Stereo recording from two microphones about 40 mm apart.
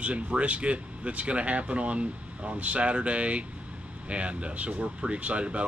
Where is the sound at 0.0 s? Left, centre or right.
Right.